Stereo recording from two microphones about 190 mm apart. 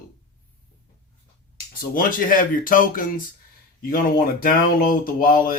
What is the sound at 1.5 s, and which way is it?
Speech, 50° left (ahead or behind).